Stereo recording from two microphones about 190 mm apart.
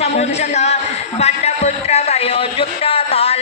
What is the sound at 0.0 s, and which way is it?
Speech, 35° left (ahead or behind).